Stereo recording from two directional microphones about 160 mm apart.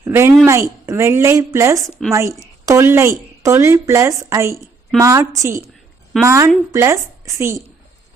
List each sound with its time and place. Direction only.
0.0 s a woman's voice: 15° right (ahead or behind)
2.0 s a woman's voice: centre (ahead or behind)
2.6 s a woman's voice: 15° right (ahead or behind)